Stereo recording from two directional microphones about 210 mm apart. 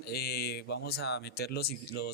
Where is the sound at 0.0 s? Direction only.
50° left (ahead or behind).